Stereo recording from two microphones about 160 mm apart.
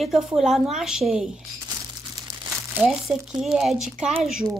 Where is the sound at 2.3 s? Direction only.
15° right (ahead or behind).